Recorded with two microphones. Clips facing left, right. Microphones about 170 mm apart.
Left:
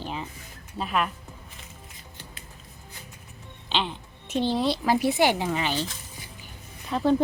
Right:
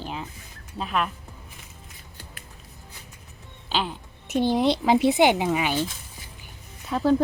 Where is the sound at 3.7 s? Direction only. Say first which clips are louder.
Right 1 dB; 5° right (ahead or behind).